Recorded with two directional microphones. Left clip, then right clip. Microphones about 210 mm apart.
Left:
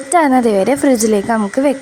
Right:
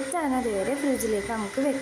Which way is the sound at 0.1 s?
40° left (ahead or behind).